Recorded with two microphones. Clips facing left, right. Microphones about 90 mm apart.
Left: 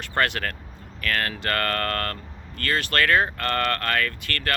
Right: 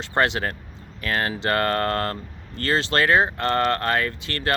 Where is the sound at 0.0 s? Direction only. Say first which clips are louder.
Right 3 dB; 20° right (ahead or behind).